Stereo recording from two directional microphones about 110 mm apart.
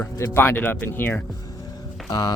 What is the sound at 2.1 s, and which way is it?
Speech, 35° left (ahead or behind).